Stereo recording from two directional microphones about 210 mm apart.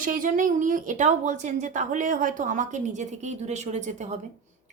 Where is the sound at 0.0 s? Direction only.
40° right (ahead or behind).